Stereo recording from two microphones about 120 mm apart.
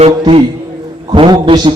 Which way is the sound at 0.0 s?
50° right (ahead or behind).